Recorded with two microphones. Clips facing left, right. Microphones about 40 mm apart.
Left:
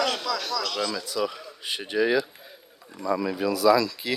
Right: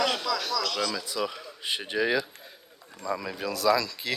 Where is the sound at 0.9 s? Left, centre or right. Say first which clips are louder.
Left 3 dB; centre.